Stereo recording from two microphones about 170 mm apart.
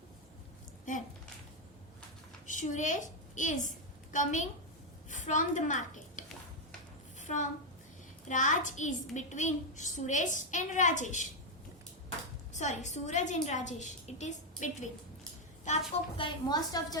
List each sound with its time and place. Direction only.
0.9 s a sound: 50° left (ahead or behind)
2.5 s a woman's voice: 50° left (ahead or behind)
5.0 s a sound: 45° left (ahead or behind)
7.2 s a woman's voice: 45° left (ahead or behind)
12.5 s a woman's voice: 45° left (ahead or behind)
16.1 s a woman's voice: 25° left (ahead or behind)